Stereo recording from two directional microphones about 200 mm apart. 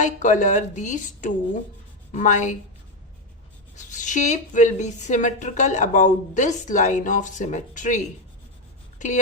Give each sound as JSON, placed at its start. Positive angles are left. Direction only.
{"t": 0.0, "sound": "a woman's voice", "side_deg": 35}
{"t": 3.9, "sound": "a woman's voice", "side_deg": 40}